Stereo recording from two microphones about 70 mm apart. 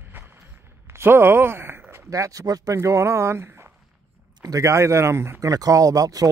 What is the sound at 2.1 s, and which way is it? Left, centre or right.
Speech, right.